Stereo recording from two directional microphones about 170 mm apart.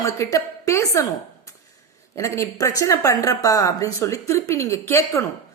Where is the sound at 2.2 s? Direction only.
20° left (ahead or behind).